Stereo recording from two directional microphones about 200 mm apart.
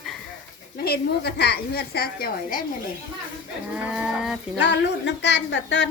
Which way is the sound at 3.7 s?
5° right (ahead or behind).